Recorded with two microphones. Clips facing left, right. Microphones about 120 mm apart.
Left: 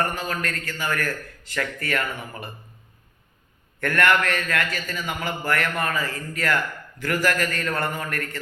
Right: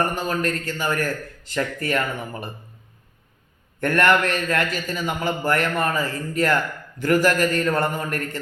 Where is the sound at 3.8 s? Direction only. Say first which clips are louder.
Right 3 dB; 25° right (ahead or behind).